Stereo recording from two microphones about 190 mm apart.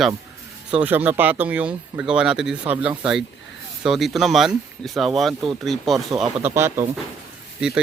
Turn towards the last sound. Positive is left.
turn(degrees=-5)  # may be behind; listen again after turning